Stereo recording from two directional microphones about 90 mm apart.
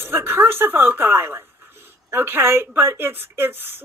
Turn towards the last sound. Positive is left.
turn(degrees=-25)  # may be behind; listen again after turning